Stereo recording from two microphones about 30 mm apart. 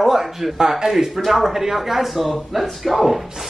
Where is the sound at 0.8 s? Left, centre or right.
Centre.